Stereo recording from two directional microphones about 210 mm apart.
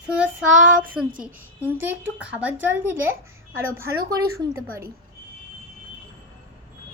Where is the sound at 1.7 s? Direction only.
10° right (ahead or behind).